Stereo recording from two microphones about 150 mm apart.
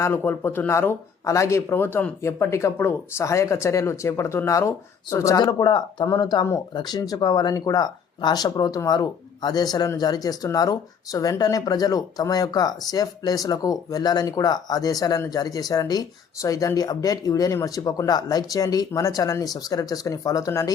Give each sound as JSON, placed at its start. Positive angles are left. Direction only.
{"t": 0.0, "sound": "speech", "side_deg": 15}